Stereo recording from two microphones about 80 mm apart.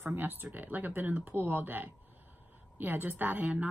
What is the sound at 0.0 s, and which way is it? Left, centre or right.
A woman's voice, right.